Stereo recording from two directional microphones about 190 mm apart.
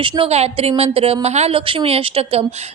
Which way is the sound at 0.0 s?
25° right (ahead or behind).